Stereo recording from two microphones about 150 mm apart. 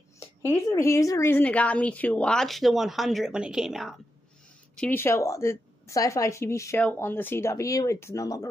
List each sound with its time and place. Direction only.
0.7 s speech: 20° left (ahead or behind); by 3.9 s centre (ahead or behind)
4.7 s a woman's voice: 10° left (ahead or behind)